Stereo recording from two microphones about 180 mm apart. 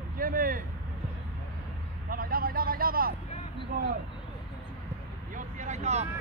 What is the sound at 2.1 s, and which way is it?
Vehicle, 55° right (ahead or behind).